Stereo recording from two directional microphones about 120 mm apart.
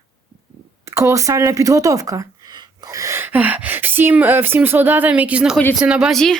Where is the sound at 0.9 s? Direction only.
25° right (ahead or behind); by 6.3 s centre (ahead or behind).